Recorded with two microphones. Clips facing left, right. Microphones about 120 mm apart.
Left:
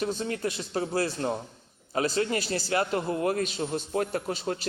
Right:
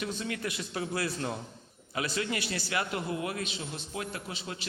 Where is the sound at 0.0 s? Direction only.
35° left (ahead or behind).